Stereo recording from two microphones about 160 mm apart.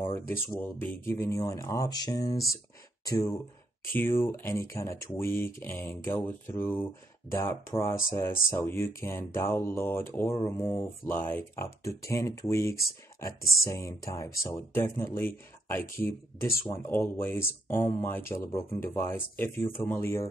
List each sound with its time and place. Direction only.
0.1 s speech: 15° left (ahead or behind)
3.9 s speech: 15° left (ahead or behind)
13.4 s speech: 65° left (ahead or behind)
13.7 s speech: 20° left (ahead or behind)